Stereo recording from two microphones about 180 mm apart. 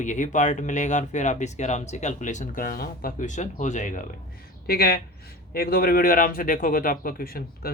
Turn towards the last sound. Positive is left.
turn(degrees=55)  # may be behind; listen again after turning